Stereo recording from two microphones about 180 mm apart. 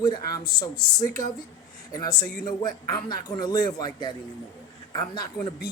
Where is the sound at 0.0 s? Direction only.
20° left (ahead or behind).